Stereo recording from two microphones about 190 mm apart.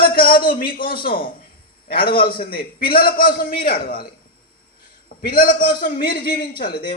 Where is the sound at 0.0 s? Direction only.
50° left (ahead or behind).